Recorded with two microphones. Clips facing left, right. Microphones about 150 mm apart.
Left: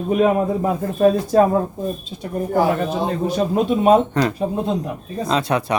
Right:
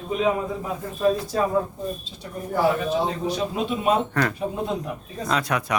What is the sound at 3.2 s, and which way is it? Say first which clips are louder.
Speech: left 7 dB; 50° left (ahead or behind).